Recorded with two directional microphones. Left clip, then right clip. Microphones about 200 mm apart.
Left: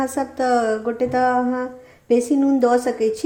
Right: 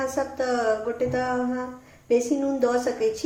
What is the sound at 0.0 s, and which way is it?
A woman's voice, 45° left (ahead or behind).